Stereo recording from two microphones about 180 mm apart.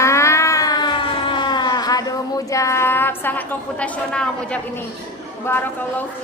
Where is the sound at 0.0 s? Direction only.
15° left (ahead or behind).